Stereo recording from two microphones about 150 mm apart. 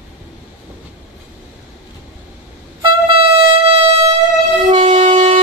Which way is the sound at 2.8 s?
35° right (ahead or behind).